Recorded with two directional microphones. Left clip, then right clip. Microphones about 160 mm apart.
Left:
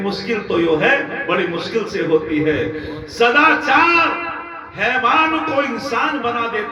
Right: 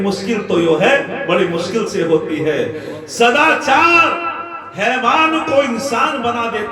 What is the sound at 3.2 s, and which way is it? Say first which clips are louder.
Speech: right 1 dB; 25° right (ahead or behind).